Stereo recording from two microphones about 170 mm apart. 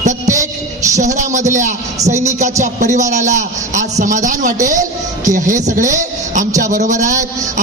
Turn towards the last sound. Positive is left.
turn(degrees=-50)  # may be behind; listen again after turning